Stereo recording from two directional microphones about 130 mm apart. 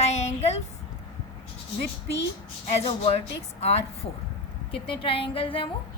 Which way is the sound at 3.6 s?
50° left (ahead or behind).